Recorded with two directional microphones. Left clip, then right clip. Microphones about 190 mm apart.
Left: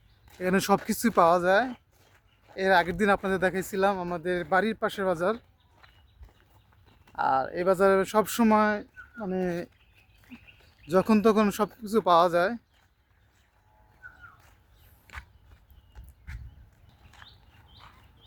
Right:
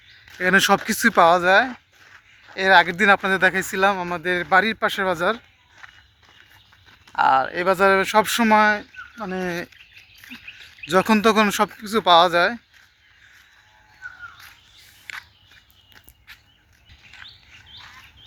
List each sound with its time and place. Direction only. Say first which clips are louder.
0.3 s speech: right 9 dB; centre (ahead or behind)
5.8 s walk: right 13 dB; centre (ahead or behind)
7.2 s speech: right 8 dB; centre (ahead or behind)
15.1 s walk: right 10 dB; 5° left (ahead or behind)
17.2 s a sound: right 9 dB; 10° right (ahead or behind)